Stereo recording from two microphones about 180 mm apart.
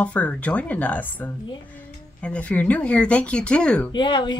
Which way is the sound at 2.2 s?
5° left (ahead or behind).